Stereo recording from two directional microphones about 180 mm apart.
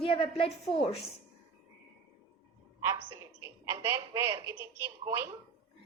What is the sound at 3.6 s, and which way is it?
Speech, 15° right (ahead or behind).